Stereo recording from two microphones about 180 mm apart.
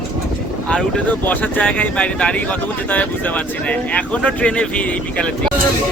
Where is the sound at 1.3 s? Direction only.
10° left (ahead or behind).